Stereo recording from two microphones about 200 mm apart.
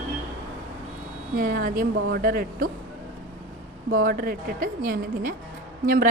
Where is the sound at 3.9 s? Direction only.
45° right (ahead or behind).